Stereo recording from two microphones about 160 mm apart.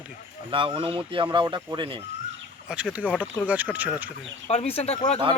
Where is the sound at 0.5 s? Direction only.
35° right (ahead or behind).